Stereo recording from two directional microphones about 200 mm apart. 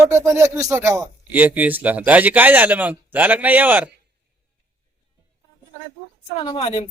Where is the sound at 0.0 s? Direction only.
15° right (ahead or behind).